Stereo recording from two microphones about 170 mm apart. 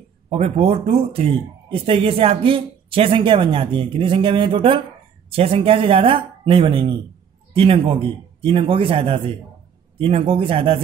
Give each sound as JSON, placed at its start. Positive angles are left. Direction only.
{"t": 0.3, "sound": "speech", "side_deg": -35}